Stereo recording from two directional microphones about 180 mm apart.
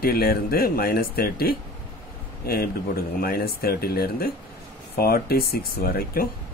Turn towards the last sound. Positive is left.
turn(degrees=55)  # may be behind; listen again after turning